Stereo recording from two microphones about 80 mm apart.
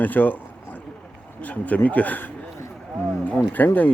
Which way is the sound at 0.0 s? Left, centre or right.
Left.